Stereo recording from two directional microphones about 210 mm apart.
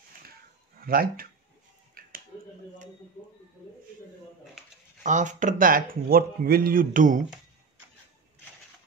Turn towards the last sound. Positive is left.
turn(degrees=-40)  # may be behind; listen again after turning